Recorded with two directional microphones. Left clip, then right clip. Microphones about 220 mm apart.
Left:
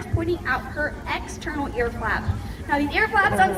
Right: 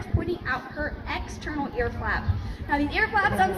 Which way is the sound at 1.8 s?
45° left (ahead or behind).